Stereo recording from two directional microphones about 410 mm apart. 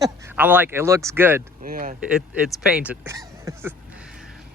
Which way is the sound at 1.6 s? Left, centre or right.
Right.